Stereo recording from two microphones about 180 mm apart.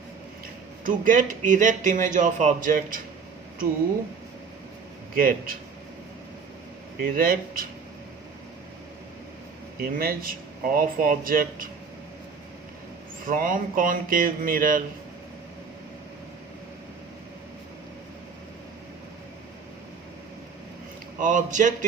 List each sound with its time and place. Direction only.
0.9 s speech: 45° right (ahead or behind)
5.1 s speech: 50° right (ahead or behind)
7.0 s speech: 50° right (ahead or behind)
9.9 s speech: 50° right (ahead or behind)
13.2 s speech: 50° right (ahead or behind)
21.2 s speech: 45° right (ahead or behind)